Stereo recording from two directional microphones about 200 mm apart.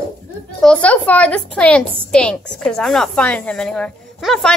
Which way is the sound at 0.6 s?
5° left (ahead or behind).